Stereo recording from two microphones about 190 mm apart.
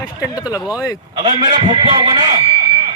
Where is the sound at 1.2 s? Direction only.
25° right (ahead or behind).